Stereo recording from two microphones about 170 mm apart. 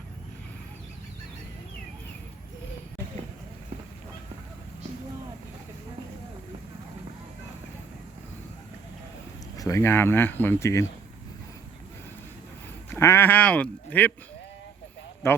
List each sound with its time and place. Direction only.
9.6 s speech: 20° left (ahead or behind)
12.9 s speech: 15° left (ahead or behind)
15.2 s speech: 15° left (ahead or behind)